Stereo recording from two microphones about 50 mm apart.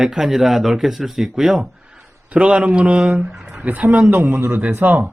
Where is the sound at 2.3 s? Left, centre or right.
Right.